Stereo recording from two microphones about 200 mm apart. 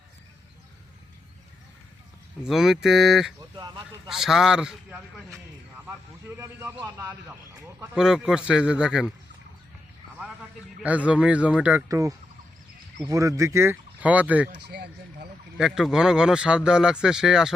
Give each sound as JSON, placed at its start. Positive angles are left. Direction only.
{"t": 2.4, "sound": "a man's voice", "side_deg": 0}
{"t": 3.5, "sound": "speech", "side_deg": -20}
{"t": 4.1, "sound": "a man's voice", "side_deg": 0}
{"t": 10.8, "sound": "a man's voice", "side_deg": -5}
{"t": 11.9, "sound": "speech", "side_deg": -15}
{"t": 14.5, "sound": "speech", "side_deg": -55}
{"t": 15.5, "sound": "a man's voice", "side_deg": -5}